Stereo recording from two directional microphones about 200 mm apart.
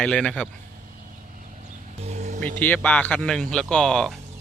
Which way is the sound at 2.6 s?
10° left (ahead or behind).